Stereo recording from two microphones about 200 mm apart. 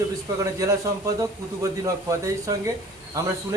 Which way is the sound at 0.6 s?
15° right (ahead or behind).